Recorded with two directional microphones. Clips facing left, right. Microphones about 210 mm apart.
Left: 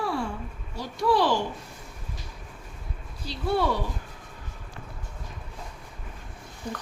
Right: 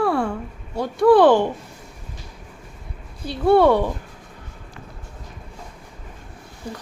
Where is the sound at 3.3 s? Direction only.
60° right (ahead or behind).